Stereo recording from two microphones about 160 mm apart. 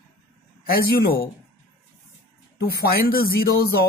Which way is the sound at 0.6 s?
70° left (ahead or behind).